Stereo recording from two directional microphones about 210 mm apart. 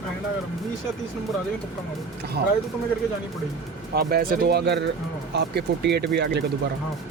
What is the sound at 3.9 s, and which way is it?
Speech, 45° right (ahead or behind).